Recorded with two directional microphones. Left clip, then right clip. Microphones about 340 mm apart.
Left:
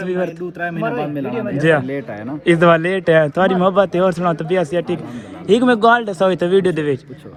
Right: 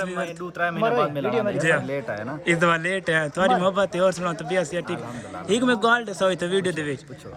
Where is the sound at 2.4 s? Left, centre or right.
Centre.